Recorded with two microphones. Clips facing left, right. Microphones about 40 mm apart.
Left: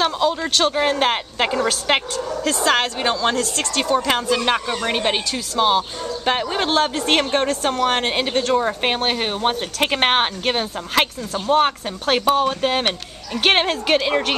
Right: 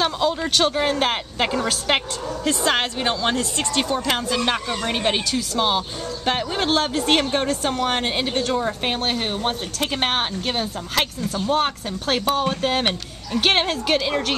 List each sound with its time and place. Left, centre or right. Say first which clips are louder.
0.0 s speech: left 2 dB; centre
0.7 s a woman's voice: left 2 dB; centre
2.4 s a woman's voice: left 2 dB; centre
3.9 s a woman's voice: left 4 dB; centre